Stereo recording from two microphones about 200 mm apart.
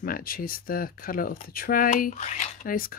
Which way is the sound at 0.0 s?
45° left (ahead or behind).